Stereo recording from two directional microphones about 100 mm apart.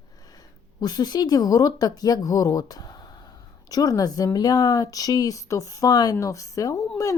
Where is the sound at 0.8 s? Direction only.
40° left (ahead or behind).